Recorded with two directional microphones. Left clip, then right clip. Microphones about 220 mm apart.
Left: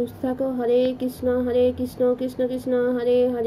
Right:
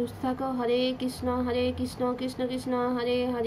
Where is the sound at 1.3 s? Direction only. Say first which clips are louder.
Left 8 dB; 20° right (ahead or behind).